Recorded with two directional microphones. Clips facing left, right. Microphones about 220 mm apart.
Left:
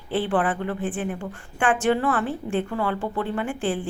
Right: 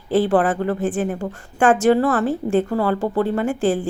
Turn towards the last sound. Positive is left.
turn(degrees=-40)  # may be behind; listen again after turning